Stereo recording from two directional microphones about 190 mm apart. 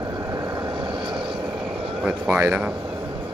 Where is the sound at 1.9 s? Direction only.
5° right (ahead or behind).